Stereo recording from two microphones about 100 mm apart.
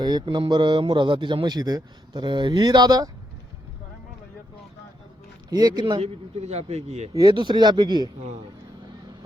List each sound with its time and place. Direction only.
0.0 s a man's voice: 45° right (ahead or behind)
5.5 s a man's voice: 45° right (ahead or behind)
6.0 s a man's voice: 90° right
7.1 s speech: 35° right (ahead or behind)
7.3 s a man's voice: 50° right (ahead or behind)